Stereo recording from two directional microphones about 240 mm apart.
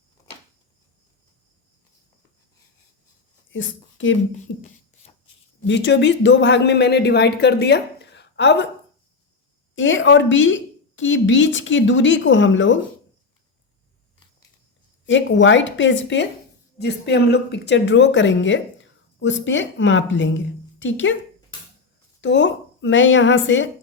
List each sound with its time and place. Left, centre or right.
3.5 s a woman's voice: left
9.7 s a woman's voice: left
15.0 s a woman's voice: left
21.5 s a sound: centre
22.2 s a woman's voice: left